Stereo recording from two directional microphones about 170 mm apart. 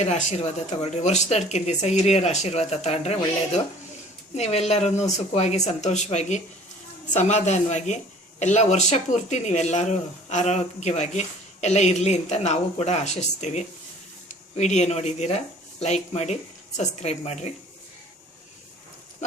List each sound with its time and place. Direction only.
0.0 s speech: 40° left (ahead or behind)